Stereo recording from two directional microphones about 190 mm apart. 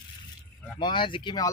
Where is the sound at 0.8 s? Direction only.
25° left (ahead or behind).